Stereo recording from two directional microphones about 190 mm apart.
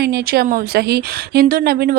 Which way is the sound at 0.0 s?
55° right (ahead or behind).